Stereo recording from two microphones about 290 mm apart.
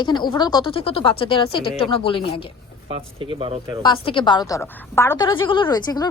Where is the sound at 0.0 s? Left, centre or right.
Centre.